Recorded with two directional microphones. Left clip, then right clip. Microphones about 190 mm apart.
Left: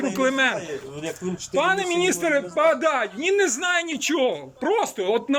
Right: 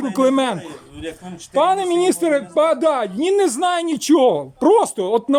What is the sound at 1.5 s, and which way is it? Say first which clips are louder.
Speech: right 5 dB; 30° right (ahead or behind).